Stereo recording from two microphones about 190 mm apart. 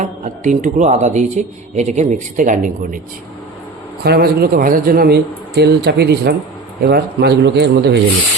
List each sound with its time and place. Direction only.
0.0 s speech: 40° right (ahead or behind)
4.0 s a man's voice: 55° right (ahead or behind)